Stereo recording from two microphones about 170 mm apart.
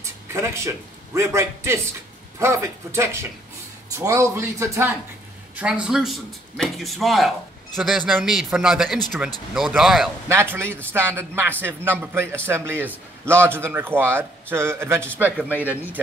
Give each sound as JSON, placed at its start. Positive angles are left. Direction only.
{"t": 0.0, "sound": "a man's voice", "side_deg": -15}
{"t": 10.2, "sound": "speech", "side_deg": -15}